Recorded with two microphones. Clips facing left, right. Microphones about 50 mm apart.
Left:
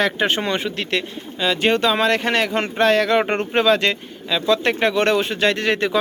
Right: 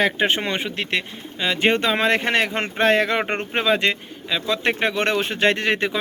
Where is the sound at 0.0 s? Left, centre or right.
Centre.